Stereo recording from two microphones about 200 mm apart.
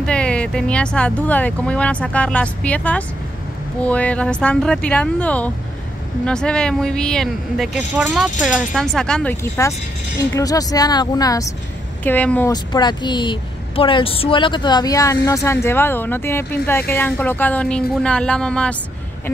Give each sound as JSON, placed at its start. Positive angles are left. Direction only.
{"t": 0.0, "sound": "speech", "side_deg": 5}